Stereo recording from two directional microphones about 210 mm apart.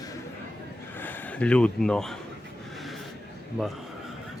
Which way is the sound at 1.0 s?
10° left (ahead or behind).